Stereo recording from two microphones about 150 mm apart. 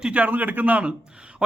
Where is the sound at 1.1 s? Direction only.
5° right (ahead or behind).